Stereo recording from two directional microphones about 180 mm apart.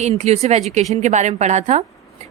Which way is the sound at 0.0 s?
40° right (ahead or behind).